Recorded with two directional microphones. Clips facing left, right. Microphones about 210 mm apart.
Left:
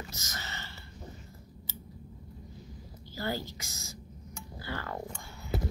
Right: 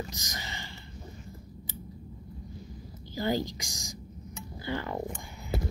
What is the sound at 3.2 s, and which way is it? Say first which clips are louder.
A woman's voice: right 6 dB; 15° right (ahead or behind).